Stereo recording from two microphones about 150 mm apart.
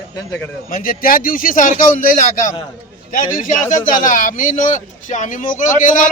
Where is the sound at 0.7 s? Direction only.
70° left (ahead or behind).